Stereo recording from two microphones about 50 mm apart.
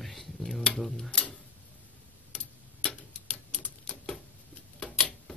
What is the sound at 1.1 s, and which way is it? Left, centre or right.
Tick-tock, centre.